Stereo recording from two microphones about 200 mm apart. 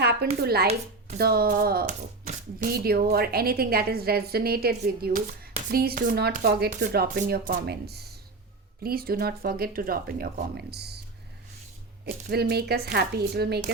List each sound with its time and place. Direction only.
0.0 s a sound: 55° right (ahead or behind)
0.4 s speech: 50° right (ahead or behind)
12.0 s speech: 50° right (ahead or behind)